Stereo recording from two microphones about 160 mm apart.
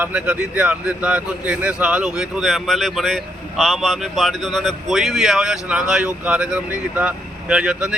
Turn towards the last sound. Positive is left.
turn(degrees=-5)  # may be behind; listen again after turning